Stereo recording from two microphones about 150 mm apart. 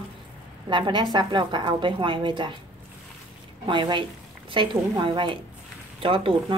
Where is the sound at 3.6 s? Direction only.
30° right (ahead or behind).